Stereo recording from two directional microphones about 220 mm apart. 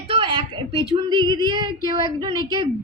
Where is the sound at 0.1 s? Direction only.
20° right (ahead or behind).